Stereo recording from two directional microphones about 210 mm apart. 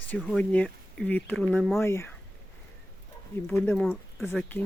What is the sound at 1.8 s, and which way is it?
Speech, 10° left (ahead or behind).